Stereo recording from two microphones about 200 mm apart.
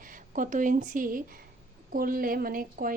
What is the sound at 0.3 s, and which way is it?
Speech, 40° right (ahead or behind).